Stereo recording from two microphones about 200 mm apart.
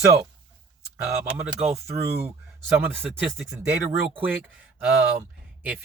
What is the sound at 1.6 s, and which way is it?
Speech, 30° right (ahead or behind).